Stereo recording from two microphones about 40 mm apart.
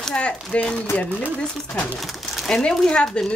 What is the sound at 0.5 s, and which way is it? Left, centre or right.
Speech, left.